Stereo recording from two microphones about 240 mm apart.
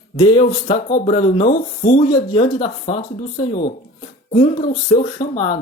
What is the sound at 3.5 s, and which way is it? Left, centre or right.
Speech, left.